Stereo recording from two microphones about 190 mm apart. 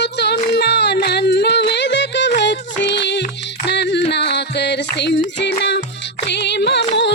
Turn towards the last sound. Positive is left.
turn(degrees=65)  # may be behind; listen again after turning